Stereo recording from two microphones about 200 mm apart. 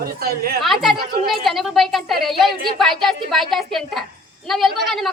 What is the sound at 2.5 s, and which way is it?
Speech, 50° right (ahead or behind).